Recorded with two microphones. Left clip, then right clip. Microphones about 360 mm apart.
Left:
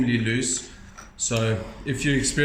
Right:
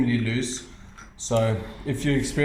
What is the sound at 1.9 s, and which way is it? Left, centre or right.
Speech, centre.